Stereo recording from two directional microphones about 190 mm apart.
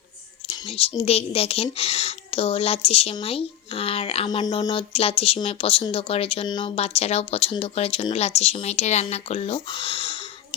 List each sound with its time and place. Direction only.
0.5 s speech: 30° left (ahead or behind)